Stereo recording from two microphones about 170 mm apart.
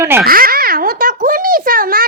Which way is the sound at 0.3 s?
60° right (ahead or behind).